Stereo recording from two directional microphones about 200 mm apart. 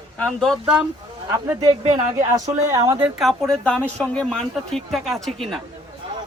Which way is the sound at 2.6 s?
15° right (ahead or behind).